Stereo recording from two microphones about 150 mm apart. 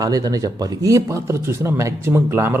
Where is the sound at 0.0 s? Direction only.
25° right (ahead or behind).